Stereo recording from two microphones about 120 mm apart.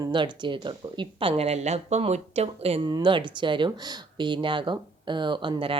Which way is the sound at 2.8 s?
40° right (ahead or behind).